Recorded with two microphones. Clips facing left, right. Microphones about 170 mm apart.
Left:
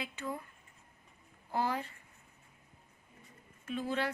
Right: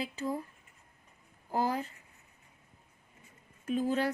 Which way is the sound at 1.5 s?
40° right (ahead or behind).